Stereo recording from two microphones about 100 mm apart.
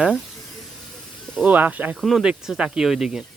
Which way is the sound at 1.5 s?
15° right (ahead or behind).